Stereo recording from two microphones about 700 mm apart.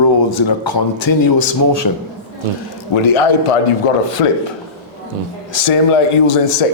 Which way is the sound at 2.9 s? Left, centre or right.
Left.